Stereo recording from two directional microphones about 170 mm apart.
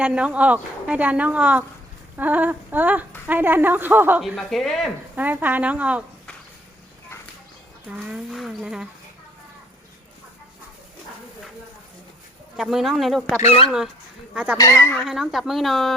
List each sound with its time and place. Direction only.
0.0 s a woman's voice: 5° right (ahead or behind)
4.2 s speech: centre (ahead or behind)
5.1 s a woman's voice: 10° right (ahead or behind)
7.9 s speech: 5° right (ahead or behind)
12.5 s speech: centre (ahead or behind)
13.4 s speech: 35° left (ahead or behind)
13.7 s a woman's voice: centre (ahead or behind)
14.6 s speech: 15° left (ahead or behind)
15.0 s speech: centre (ahead or behind)